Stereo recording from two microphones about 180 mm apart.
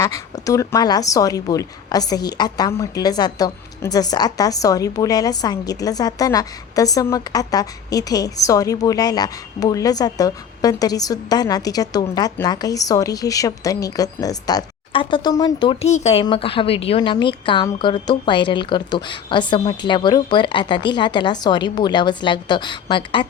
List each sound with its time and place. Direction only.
0.4 s a woman's voice: 20° left (ahead or behind)